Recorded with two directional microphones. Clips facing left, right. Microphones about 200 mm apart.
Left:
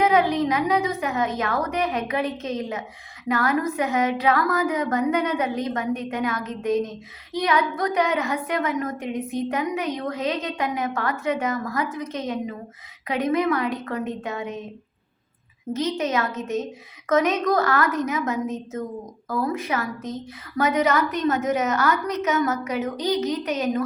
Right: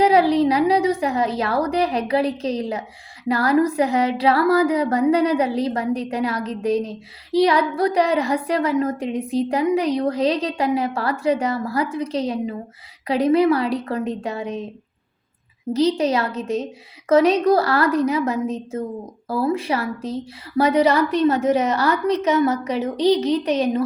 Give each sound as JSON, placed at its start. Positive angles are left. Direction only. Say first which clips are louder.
{"t": 0.0, "sound": "speech", "louder": "right 4 dB", "side_deg": -35}
{"t": 15.7, "sound": "speech", "louder": "right 6 dB", "side_deg": -35}